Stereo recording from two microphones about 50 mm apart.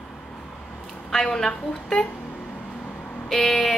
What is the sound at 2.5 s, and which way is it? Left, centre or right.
Vehicle, left.